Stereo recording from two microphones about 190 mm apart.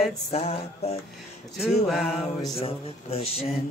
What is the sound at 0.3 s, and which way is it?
Speech, 30° left (ahead or behind).